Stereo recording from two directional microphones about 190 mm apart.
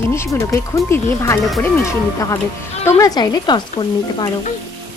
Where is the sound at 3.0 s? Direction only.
20° left (ahead or behind).